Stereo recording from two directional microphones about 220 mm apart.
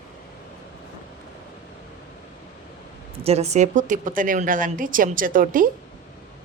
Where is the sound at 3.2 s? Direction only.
30° right (ahead or behind).